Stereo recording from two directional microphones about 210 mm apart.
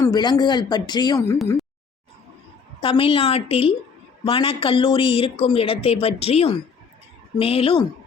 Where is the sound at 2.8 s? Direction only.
25° left (ahead or behind).